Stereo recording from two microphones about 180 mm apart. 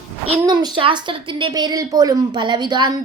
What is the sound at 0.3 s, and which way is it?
A child's voice, 25° right (ahead or behind).